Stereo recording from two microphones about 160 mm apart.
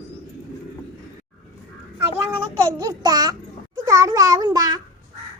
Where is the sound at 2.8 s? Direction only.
20° right (ahead or behind).